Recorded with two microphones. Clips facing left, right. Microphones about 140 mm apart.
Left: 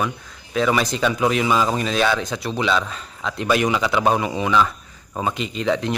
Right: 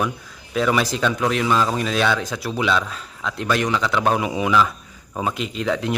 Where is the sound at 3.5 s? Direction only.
10° left (ahead or behind).